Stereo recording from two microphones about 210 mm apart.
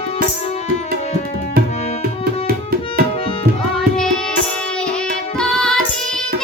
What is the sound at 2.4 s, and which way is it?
Tabla, 45° right (ahead or behind).